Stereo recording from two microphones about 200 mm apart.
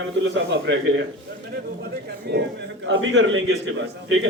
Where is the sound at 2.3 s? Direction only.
55° right (ahead or behind).